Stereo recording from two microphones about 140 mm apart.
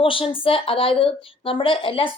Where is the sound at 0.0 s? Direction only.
40° left (ahead or behind).